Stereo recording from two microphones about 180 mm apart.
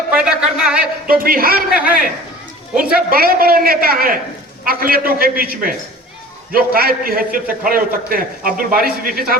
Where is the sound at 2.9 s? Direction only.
55° right (ahead or behind).